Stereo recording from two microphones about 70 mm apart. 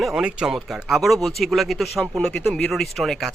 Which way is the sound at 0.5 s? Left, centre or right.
Centre.